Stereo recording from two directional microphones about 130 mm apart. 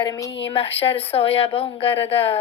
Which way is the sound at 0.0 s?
35° left (ahead or behind).